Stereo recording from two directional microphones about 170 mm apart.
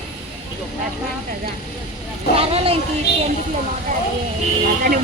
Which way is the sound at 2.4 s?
35° right (ahead or behind).